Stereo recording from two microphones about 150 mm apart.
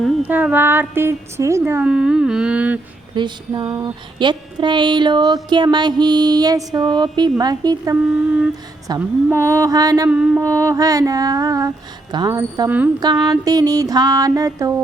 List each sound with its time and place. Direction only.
0.0 s a woman's voice: 10° right (ahead or behind)
1.8 s a woman's voice: 5° right (ahead or behind)
3.2 s female singing: 30° right (ahead or behind)
9.0 s female singing: 15° right (ahead or behind)
10.1 s a woman's voice: 5° right (ahead or behind)
10.4 s female singing: 20° right (ahead or behind)